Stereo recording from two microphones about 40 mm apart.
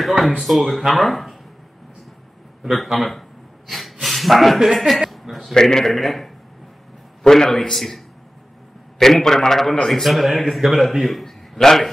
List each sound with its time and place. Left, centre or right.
0.4 s speech: centre
2.6 s a sound: centre
4.7 s speech: centre
5.1 s a sound: centre
5.5 s a man's voice: centre
5.9 s speech: centre
7.2 s a man's voice: centre